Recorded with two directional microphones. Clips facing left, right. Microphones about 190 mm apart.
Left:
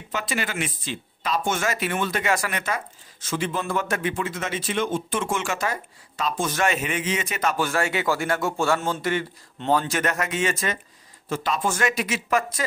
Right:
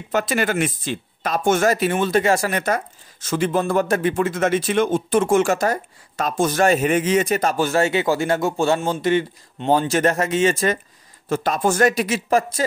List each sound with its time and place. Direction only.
0.1 s speech: 45° right (ahead or behind)
11.2 s speech: 45° right (ahead or behind)